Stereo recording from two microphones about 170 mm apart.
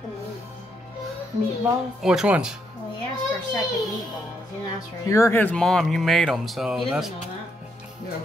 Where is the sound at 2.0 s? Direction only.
5° right (ahead or behind).